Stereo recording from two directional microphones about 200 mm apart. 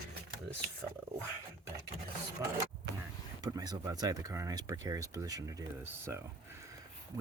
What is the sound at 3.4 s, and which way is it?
Speech, 20° right (ahead or behind).